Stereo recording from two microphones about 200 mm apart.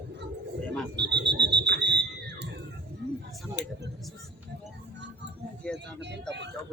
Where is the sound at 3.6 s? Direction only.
60° left (ahead or behind).